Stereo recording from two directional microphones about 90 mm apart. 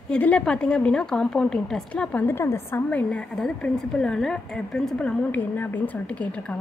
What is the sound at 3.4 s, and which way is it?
A woman's voice, 10° left (ahead or behind).